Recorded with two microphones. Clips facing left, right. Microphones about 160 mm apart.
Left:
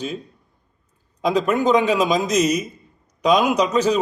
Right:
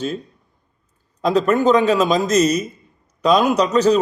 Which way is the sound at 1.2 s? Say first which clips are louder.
Right 3 dB; 10° left (ahead or behind).